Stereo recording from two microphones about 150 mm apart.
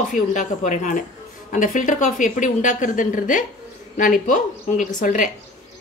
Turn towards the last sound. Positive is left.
turn(degrees=60)  # may be behind; listen again after turning